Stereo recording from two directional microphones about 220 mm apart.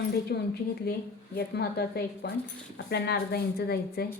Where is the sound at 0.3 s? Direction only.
45° left (ahead or behind).